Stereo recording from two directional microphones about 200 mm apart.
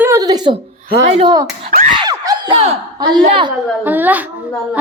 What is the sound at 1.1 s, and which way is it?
Child singing, 20° right (ahead or behind).